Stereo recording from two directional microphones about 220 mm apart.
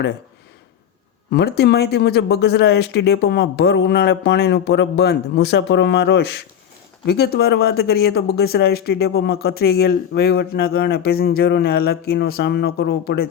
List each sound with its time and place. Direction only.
1.3 s speech: 50° left (ahead or behind)